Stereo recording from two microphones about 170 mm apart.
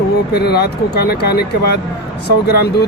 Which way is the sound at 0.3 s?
70° left (ahead or behind).